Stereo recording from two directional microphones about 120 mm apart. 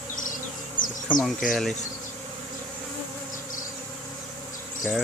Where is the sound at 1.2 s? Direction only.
Centre (ahead or behind).